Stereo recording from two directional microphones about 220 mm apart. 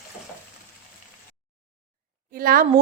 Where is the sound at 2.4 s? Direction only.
40° right (ahead or behind).